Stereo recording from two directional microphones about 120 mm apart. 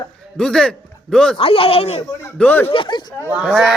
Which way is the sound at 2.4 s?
15° left (ahead or behind).